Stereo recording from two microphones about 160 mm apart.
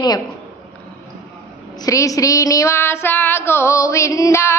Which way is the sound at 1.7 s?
20° left (ahead or behind).